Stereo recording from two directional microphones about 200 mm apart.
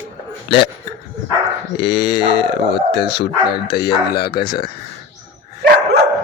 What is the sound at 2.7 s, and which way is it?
Speech, 55° left (ahead or behind).